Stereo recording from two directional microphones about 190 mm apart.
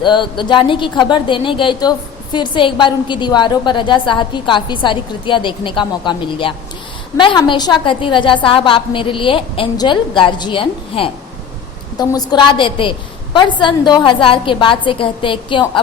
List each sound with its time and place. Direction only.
0.0 s a woman's voice: 25° left (ahead or behind)